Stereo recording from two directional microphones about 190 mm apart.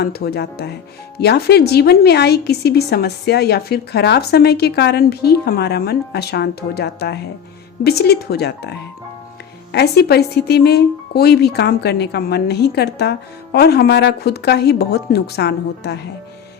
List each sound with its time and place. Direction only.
0.0 s speech: 55° left (ahead or behind)